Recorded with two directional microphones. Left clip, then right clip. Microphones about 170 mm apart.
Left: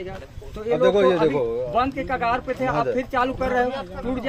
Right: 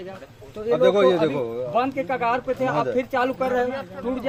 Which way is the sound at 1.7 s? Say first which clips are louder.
Right 2 dB; 20° right (ahead or behind).